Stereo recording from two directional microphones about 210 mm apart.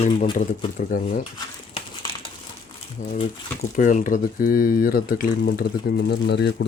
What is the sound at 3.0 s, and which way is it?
Speech, 35° left (ahead or behind).